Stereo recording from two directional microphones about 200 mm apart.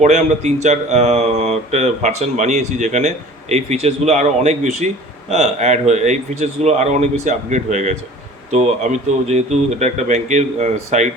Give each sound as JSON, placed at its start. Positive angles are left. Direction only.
{"t": 0.0, "sound": "speech", "side_deg": -35}